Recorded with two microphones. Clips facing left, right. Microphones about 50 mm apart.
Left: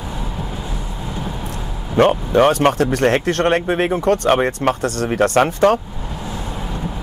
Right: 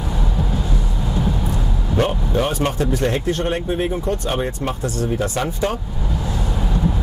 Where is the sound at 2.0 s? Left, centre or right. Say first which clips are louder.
Left 7 dB; left.